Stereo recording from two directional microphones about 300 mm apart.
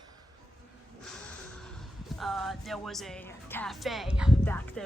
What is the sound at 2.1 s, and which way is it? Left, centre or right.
Speech, centre.